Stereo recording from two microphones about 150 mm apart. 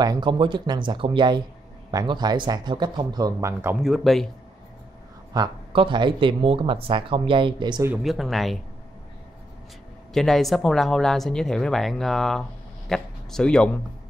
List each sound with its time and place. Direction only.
0.0 s speech: 30° right (ahead or behind)
3.8 s speech: centre (ahead or behind)
5.3 s speech: 30° right (ahead or behind)
8.0 s speech: centre (ahead or behind)
10.1 s speech: centre (ahead or behind)